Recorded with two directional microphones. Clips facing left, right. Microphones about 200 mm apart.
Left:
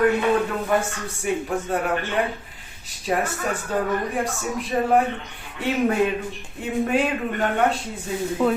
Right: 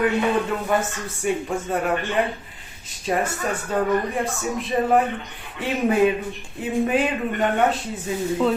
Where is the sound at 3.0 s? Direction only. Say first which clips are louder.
Even; centre (ahead or behind).